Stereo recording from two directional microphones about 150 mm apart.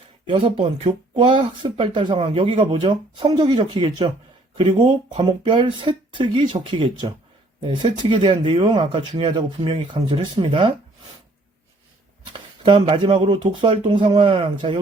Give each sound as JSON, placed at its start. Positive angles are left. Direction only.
{"t": 0.3, "sound": "speech", "side_deg": -35}
{"t": 12.3, "sound": "speech", "side_deg": -35}